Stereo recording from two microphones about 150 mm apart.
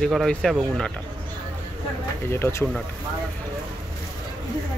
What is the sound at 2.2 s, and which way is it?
Speech, 15° left (ahead or behind).